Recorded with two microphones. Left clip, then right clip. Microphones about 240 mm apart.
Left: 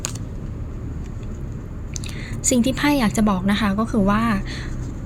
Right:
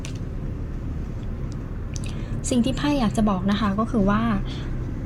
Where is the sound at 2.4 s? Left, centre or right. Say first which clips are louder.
Left 5 dB; left.